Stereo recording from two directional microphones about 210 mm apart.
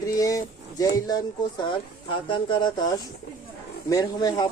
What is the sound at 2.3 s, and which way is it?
Speech, 20° left (ahead or behind).